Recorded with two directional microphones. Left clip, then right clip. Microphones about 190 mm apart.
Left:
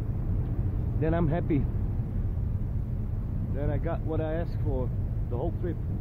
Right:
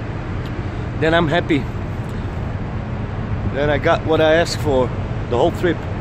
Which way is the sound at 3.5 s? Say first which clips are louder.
Right 18 dB; 10° right (ahead or behind).